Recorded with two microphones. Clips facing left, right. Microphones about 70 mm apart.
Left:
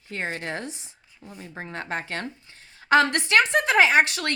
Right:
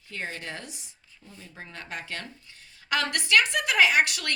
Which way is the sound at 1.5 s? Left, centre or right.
Left.